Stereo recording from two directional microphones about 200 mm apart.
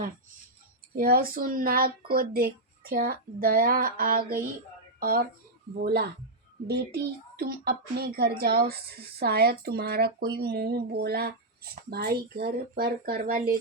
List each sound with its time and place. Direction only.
0.9 s a child's voice: 45° right (ahead or behind)